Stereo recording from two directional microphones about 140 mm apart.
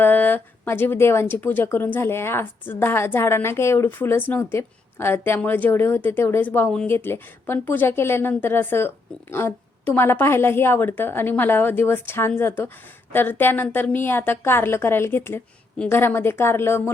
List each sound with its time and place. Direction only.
0.0 s speech: 15° left (ahead or behind)